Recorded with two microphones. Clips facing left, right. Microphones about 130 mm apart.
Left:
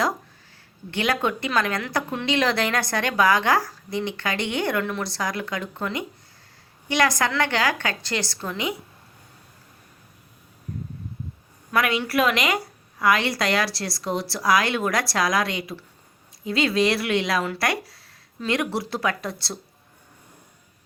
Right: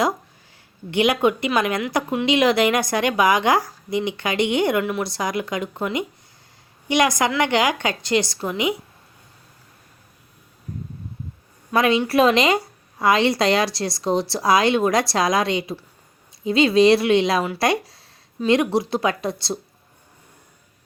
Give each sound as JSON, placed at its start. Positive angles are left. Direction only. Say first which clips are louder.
{"t": 0.9, "sound": "a woman's voice", "louder": "right 6 dB", "side_deg": -15}
{"t": 11.7, "sound": "a woman's voice", "louder": "right 5 dB", "side_deg": -25}